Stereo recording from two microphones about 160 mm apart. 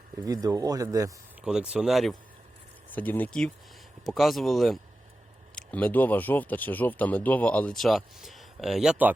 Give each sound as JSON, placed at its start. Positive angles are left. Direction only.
{"t": 0.3, "sound": "speech", "side_deg": -20}
{"t": 1.4, "sound": "speech", "side_deg": -5}
{"t": 2.9, "sound": "speech", "side_deg": 10}